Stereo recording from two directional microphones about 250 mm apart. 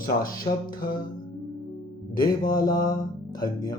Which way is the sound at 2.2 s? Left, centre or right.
Centre.